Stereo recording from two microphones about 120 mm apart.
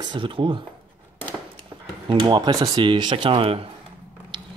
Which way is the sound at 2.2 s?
40° right (ahead or behind).